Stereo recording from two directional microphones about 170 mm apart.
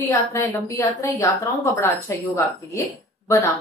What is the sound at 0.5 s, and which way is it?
Speech, 20° left (ahead or behind).